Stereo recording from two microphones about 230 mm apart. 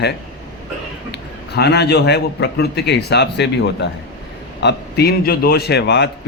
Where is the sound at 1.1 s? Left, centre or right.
Left.